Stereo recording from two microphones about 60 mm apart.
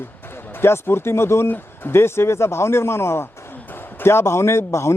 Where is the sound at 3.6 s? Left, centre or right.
Left.